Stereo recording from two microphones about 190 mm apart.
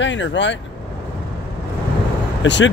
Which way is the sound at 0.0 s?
75° left (ahead or behind).